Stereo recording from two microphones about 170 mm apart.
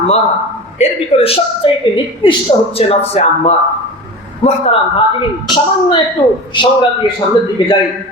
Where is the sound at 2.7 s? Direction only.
35° left (ahead or behind).